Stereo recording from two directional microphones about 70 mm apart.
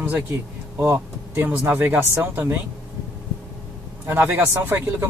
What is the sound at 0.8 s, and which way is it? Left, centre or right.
Speech, right.